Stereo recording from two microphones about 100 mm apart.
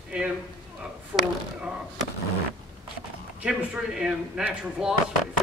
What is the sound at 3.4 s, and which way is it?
Speech, 5° right (ahead or behind).